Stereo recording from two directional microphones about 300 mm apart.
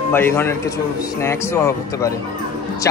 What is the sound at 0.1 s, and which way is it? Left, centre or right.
Speech, centre.